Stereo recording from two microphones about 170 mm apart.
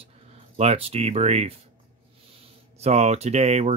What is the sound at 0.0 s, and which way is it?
Speech, 40° right (ahead or behind).